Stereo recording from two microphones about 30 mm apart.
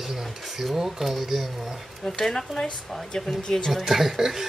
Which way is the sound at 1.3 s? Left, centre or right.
Centre.